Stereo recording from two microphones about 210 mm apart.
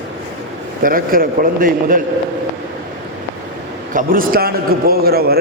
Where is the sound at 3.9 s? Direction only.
40° right (ahead or behind).